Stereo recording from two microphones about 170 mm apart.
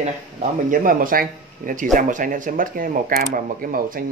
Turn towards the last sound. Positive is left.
turn(degrees=-55)  # may be behind; listen again after turning